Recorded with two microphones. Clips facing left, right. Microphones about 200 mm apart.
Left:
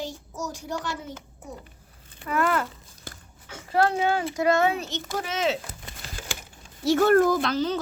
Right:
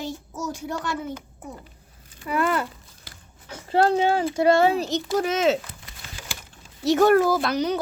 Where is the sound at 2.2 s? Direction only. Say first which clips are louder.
Right 1 dB; 10° right (ahead or behind).